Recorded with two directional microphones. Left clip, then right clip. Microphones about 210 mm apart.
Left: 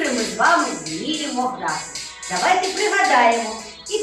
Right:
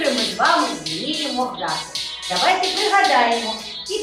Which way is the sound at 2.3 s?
40° right (ahead or behind).